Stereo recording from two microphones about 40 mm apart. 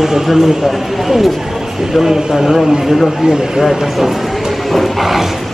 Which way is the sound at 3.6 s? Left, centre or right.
Centre.